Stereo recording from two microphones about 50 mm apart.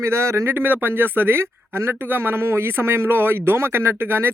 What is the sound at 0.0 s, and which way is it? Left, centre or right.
Speech, right.